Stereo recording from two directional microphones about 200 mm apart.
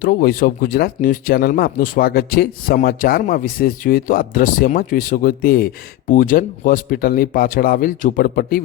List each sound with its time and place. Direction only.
0.0 s speech: 45° left (ahead or behind)